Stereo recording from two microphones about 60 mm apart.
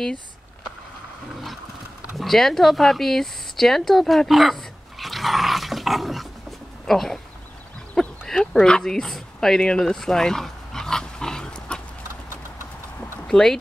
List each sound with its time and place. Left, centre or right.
2.1 s speech: centre
7.9 s a sound: centre
13.3 s speech: centre